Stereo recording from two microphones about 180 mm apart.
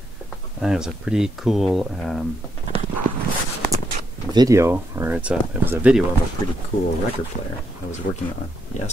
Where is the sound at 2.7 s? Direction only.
30° right (ahead or behind).